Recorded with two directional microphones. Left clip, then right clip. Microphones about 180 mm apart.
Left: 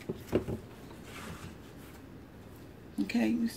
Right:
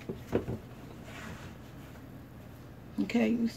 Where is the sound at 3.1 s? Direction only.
25° right (ahead or behind).